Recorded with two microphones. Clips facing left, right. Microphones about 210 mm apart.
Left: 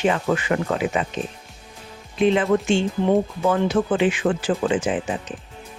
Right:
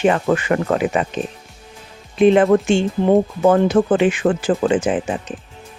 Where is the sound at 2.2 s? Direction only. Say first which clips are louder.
Right 6 dB; 55° right (ahead or behind).